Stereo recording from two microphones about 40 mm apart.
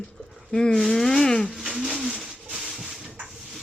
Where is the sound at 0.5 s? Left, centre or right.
Centre.